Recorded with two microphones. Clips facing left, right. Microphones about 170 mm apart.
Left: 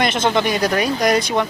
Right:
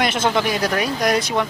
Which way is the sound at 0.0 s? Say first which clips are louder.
Left 2 dB; 5° right (ahead or behind).